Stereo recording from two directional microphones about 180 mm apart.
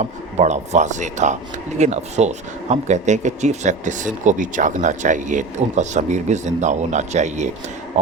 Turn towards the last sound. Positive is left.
turn(degrees=-40)  # may be behind; listen again after turning